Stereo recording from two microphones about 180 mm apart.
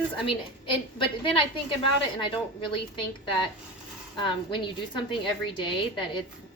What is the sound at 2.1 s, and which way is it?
A woman's voice, 25° left (ahead or behind).